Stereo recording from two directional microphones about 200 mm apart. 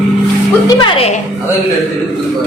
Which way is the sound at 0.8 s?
30° left (ahead or behind).